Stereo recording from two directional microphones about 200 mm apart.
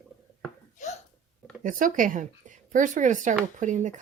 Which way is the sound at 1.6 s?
40° right (ahead or behind).